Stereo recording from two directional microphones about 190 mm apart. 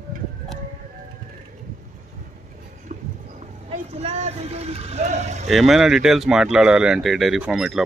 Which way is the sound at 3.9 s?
35° right (ahead or behind).